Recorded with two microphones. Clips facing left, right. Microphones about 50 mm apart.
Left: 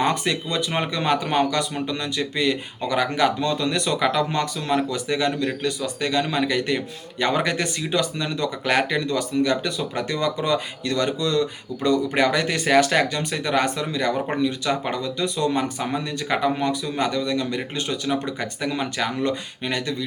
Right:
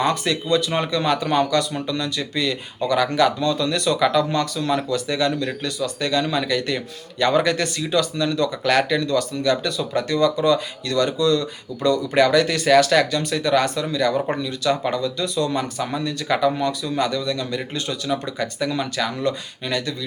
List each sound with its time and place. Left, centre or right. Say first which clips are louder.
0.0 s speech: right 1 dB; left